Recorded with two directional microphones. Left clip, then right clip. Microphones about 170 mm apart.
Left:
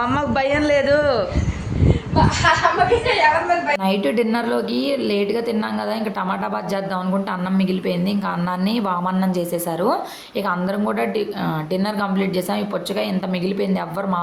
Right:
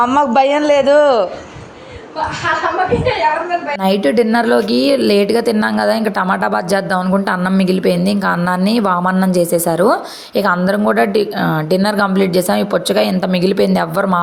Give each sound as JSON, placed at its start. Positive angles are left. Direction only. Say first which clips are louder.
{"t": 0.0, "sound": "a man's voice", "louder": "right 8 dB", "side_deg": -30}
{"t": 3.8, "sound": "a woman's voice", "louder": "right 6 dB", "side_deg": -30}